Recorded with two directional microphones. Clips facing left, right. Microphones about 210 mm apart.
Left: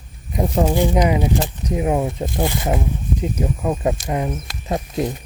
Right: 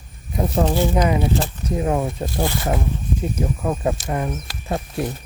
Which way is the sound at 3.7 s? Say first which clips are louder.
Left 2 dB; 15° left (ahead or behind).